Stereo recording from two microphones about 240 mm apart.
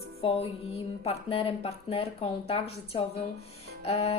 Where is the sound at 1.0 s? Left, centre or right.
Left.